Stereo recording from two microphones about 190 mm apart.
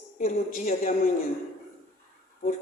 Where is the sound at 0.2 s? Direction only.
45° left (ahead or behind).